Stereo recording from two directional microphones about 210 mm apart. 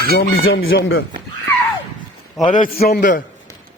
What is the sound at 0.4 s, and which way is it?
Speech, 70° left (ahead or behind).